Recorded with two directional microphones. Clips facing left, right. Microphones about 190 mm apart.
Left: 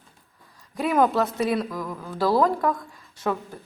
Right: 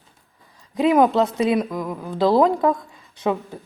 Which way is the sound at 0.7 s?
20° right (ahead or behind).